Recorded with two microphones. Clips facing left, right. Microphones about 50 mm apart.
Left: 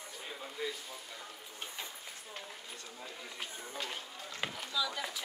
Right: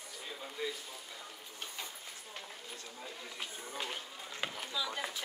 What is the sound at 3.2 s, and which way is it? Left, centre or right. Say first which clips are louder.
Chatter: even; centre.